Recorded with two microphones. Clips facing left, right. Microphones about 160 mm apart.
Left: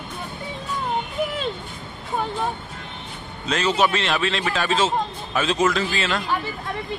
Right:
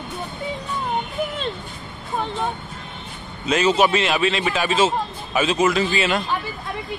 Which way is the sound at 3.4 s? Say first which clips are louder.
Right 3 dB; 10° right (ahead or behind).